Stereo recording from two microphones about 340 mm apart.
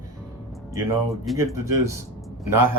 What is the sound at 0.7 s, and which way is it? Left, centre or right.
Speech, centre.